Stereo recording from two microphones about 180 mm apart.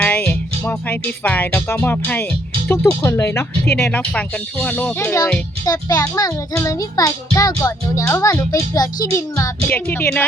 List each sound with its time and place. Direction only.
0.0 s speech: 10° left (ahead or behind)
5.6 s a child's voice: 20° left (ahead or behind)